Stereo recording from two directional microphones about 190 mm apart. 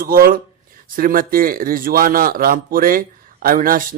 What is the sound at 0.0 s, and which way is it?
A man's voice, 50° right (ahead or behind).